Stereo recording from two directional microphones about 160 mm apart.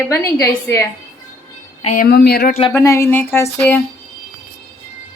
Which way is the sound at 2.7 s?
20° left (ahead or behind).